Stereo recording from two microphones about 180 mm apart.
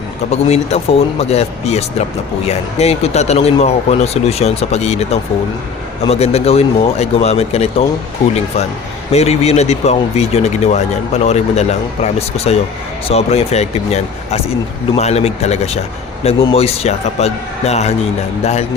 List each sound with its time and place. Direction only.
0.3 s speech: 35° left (ahead or behind)
9.1 s speech: 35° left (ahead or behind)